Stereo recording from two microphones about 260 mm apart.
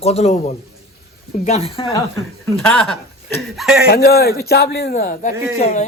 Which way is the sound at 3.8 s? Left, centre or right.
Left.